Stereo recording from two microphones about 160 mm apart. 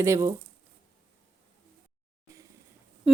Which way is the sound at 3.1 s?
Centre (ahead or behind).